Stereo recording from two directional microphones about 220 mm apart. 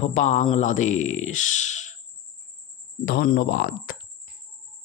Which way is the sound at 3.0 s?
45° left (ahead or behind).